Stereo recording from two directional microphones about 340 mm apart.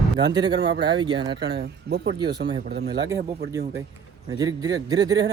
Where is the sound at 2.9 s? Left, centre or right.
Centre.